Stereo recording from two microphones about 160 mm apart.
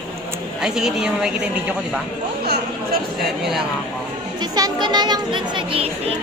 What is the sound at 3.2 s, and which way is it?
Speech, centre (ahead or behind).